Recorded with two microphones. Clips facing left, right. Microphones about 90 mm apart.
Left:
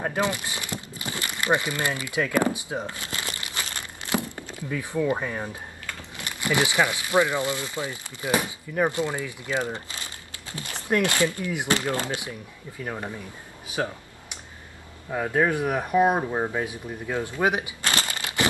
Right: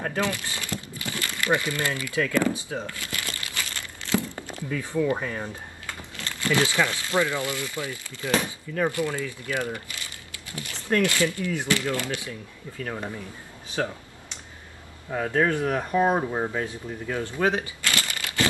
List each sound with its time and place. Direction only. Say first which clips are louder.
0.0 s crumpling: left 1 dB; 20° left (ahead or behind)
4.6 s speech: even; 15° left (ahead or behind)
10.9 s speech: even; 15° left (ahead or behind)
13.7 s a sound: even; 10° left (ahead or behind)
15.0 s speech: even; 10° left (ahead or behind)